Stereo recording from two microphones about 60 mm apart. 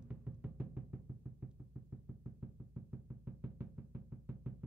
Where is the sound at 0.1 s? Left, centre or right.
Right.